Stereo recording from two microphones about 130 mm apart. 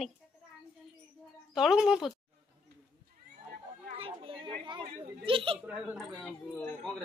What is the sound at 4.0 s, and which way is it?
A woman's voice, 40° right (ahead or behind).